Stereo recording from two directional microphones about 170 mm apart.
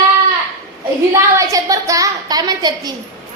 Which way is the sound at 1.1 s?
20° right (ahead or behind).